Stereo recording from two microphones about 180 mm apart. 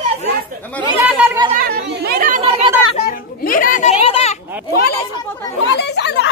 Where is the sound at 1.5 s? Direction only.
55° right (ahead or behind).